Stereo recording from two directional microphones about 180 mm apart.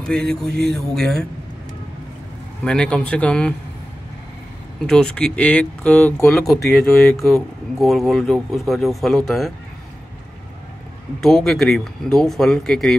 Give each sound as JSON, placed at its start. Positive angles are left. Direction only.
{"t": 0.0, "sound": "speech", "side_deg": 5}
{"t": 2.6, "sound": "speech", "side_deg": 5}
{"t": 4.8, "sound": "speech", "side_deg": 5}
{"t": 11.1, "sound": "speech", "side_deg": 0}